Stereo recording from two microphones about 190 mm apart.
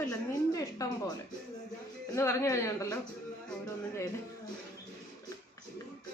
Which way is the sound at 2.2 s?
15° left (ahead or behind).